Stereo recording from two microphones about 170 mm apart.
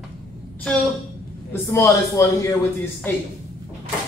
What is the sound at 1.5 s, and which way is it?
A man's voice, 15° left (ahead or behind).